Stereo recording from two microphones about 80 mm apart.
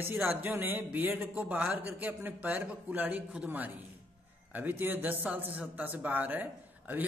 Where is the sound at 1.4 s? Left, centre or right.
Centre.